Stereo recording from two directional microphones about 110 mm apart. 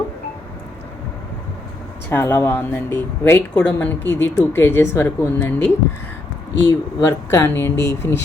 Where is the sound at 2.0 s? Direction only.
20° left (ahead or behind).